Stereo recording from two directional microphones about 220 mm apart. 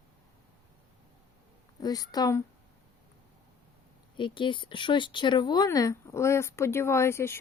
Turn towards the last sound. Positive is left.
turn(degrees=10)  # may be behind; listen again after turning